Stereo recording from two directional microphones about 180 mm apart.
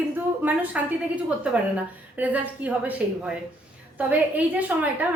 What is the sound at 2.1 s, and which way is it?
A woman's voice, 10° right (ahead or behind).